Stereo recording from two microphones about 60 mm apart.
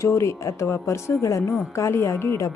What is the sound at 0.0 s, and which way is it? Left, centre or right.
A woman's voice, left.